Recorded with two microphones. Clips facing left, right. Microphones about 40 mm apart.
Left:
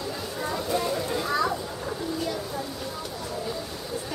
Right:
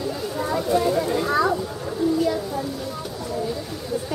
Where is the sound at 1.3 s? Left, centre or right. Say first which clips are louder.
Right 5 dB; centre.